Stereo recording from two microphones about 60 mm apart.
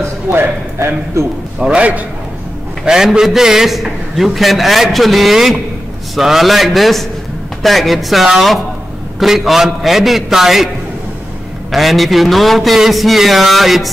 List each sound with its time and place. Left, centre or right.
0.3 s speech: right
1.6 s a man's voice: centre
2.8 s a man's voice: centre
11.7 s a man's voice: centre